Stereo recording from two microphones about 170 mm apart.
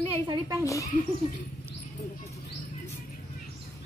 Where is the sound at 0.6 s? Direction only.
20° left (ahead or behind).